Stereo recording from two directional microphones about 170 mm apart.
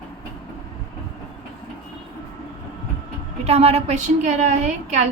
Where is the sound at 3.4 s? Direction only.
35° right (ahead or behind).